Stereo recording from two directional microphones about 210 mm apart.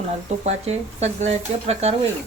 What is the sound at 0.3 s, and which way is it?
Speech, 30° right (ahead or behind).